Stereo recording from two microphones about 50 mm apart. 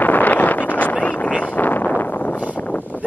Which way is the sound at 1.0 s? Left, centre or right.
Left.